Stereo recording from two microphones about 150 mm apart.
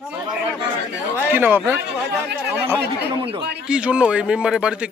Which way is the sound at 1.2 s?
15° right (ahead or behind).